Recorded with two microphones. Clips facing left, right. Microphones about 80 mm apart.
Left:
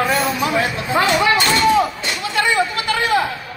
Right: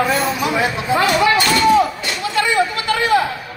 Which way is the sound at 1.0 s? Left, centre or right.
Left.